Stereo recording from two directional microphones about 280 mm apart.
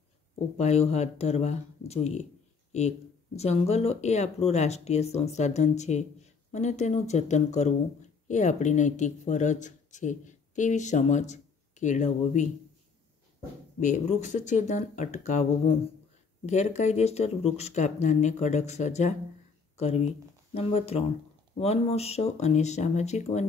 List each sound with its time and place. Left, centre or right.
0.6 s speech: left
3.3 s speech: left
13.7 s speech: left
20.5 s speech: left